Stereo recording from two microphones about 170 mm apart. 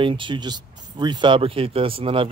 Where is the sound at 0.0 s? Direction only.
30° right (ahead or behind).